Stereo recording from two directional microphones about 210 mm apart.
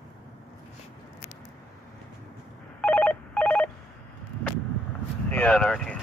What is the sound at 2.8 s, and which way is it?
Telephone bell ringing, 5° left (ahead or behind).